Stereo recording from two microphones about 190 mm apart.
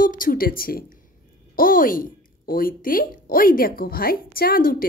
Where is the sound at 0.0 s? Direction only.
45° left (ahead or behind).